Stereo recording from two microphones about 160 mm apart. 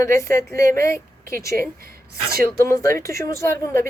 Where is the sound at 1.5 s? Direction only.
10° left (ahead or behind).